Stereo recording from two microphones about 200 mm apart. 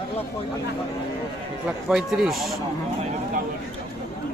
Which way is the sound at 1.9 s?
5° right (ahead or behind).